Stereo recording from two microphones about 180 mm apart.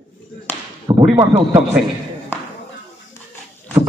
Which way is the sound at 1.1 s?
25° right (ahead or behind).